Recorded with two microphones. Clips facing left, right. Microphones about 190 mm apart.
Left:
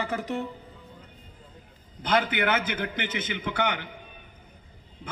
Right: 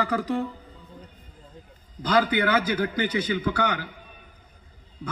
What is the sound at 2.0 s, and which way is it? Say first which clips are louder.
A man's voice: right 3 dB; 25° left (ahead or behind).